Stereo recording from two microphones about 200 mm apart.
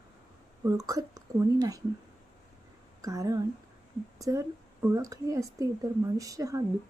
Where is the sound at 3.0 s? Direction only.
15° right (ahead or behind).